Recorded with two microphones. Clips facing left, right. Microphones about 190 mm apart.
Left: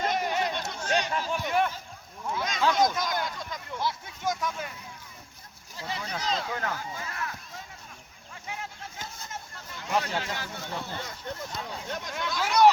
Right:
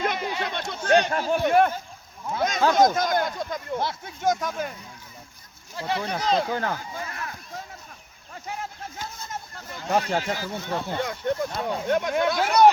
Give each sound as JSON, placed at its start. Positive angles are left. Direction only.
{"t": 0.0, "sound": "chatter", "side_deg": -65}
{"t": 0.7, "sound": "speech", "side_deg": -60}
{"t": 5.7, "sound": "speech", "side_deg": -65}
{"t": 6.4, "sound": "speech", "side_deg": -35}
{"t": 9.6, "sound": "speech", "side_deg": -50}